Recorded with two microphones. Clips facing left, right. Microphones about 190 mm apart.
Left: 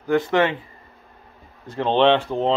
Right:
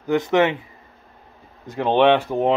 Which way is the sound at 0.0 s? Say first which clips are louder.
Right 1 dB; 20° right (ahead or behind).